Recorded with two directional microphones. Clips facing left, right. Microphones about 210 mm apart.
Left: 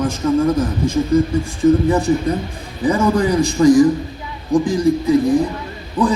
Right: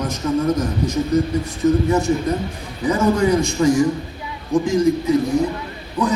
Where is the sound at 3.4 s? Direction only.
35° left (ahead or behind).